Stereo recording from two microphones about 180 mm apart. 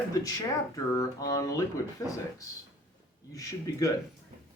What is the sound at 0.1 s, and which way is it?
Speech, 20° left (ahead or behind).